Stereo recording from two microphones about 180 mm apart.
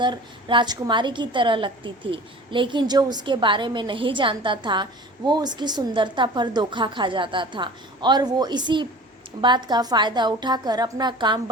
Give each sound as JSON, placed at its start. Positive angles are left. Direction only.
{"t": 0.0, "sound": "a woman's voice", "side_deg": -25}